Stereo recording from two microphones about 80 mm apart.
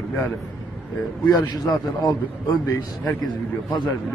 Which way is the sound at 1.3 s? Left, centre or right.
Left.